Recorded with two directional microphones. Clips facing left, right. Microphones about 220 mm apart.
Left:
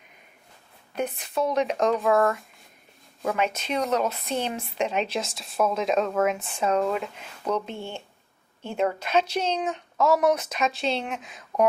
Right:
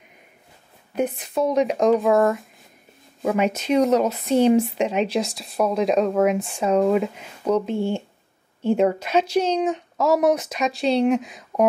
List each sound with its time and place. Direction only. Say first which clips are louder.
0.9 s speech: right 5 dB; 5° right (ahead or behind)
7.7 s speech: right 11 dB; 35° right (ahead or behind)
8.6 s speech: right 7 dB; 5° right (ahead or behind)